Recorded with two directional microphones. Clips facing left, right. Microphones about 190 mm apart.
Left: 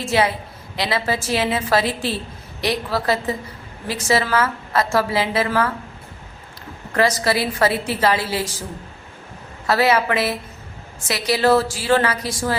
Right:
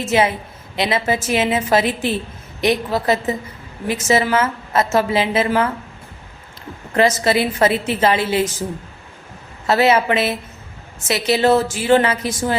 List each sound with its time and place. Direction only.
0.0 s a woman's voice: 20° right (ahead or behind)
6.9 s a woman's voice: 20° right (ahead or behind)
9.6 s a woman's voice: 25° right (ahead or behind)